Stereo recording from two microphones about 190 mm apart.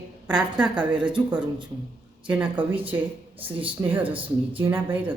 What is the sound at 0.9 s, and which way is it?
Speech, 25° right (ahead or behind).